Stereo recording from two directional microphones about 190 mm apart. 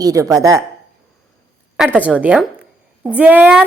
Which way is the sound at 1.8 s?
10° right (ahead or behind).